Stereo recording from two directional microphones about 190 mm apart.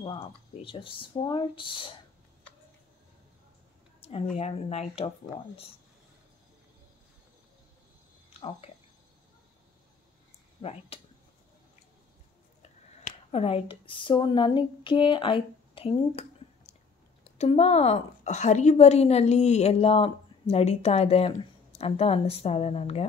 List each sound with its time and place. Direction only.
0.0 s speech: 25° left (ahead or behind)
4.0 s a woman's voice: 30° left (ahead or behind)
8.3 s a sound: 30° left (ahead or behind)
10.6 s a woman's voice: 30° left (ahead or behind)
13.3 s a woman's voice: 30° left (ahead or behind)